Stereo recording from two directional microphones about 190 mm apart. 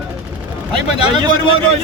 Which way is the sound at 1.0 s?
25° right (ahead or behind).